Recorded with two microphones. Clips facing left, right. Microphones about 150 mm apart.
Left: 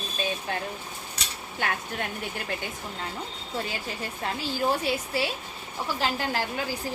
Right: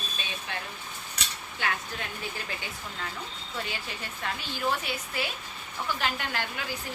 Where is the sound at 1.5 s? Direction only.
50° left (ahead or behind).